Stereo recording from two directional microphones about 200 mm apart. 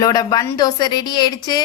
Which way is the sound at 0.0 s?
20° left (ahead or behind).